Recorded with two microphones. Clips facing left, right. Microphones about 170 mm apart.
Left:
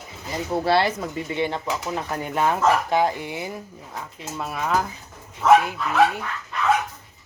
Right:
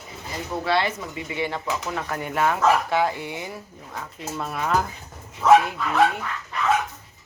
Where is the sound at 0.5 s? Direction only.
35° left (ahead or behind).